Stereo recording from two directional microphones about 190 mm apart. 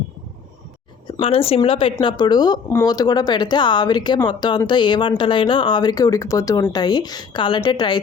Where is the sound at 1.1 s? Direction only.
30° left (ahead or behind).